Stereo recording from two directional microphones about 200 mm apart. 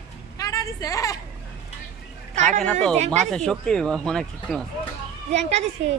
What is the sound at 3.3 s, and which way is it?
Speech, 5° left (ahead or behind).